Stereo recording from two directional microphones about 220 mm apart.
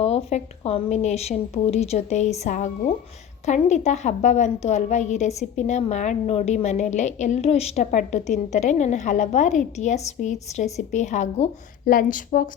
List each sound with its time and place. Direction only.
0.0 s a woman's voice: 30° left (ahead or behind)